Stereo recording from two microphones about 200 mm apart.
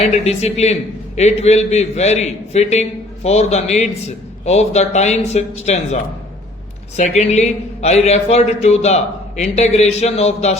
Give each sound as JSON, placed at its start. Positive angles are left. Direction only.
{"t": 0.0, "sound": "a man's voice", "side_deg": 30}